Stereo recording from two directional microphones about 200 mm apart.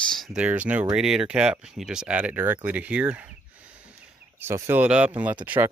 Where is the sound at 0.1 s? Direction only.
Centre (ahead or behind).